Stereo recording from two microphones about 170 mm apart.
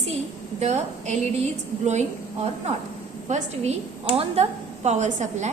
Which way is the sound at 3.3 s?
45° right (ahead or behind).